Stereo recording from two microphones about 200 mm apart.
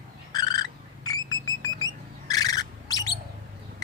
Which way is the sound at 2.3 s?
20° left (ahead or behind).